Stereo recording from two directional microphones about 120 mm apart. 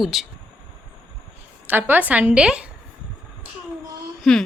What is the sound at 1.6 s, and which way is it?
A woman's voice, 15° right (ahead or behind).